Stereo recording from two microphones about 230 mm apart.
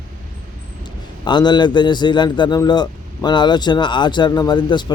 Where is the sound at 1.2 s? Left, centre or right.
Centre.